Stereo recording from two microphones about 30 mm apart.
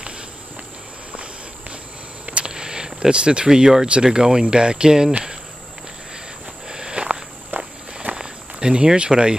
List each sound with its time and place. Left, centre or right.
2.4 s a sound: right
3.1 s speech: right
3.4 s speech: centre
3.8 s speech: right
6.7 s walk: right
7.5 s walk: right
8.1 s walk: right
8.9 s speech: right